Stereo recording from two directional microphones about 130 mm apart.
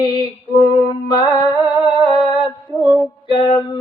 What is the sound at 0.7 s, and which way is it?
Music, 35° left (ahead or behind).